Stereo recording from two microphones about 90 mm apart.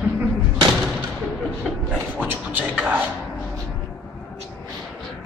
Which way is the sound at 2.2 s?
15° right (ahead or behind).